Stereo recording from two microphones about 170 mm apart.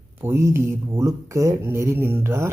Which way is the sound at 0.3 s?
15° right (ahead or behind).